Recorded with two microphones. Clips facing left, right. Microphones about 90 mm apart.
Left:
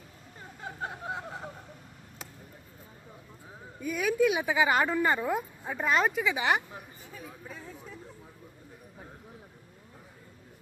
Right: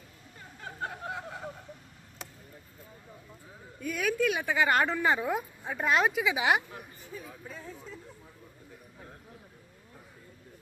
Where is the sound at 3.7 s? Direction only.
5° left (ahead or behind).